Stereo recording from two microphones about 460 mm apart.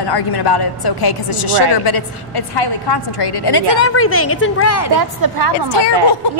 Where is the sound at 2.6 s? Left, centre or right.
Left.